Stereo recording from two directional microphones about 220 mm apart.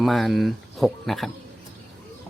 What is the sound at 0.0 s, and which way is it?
Speech, centre (ahead or behind).